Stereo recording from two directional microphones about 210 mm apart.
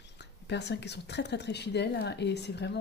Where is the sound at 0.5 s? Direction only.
55° left (ahead or behind).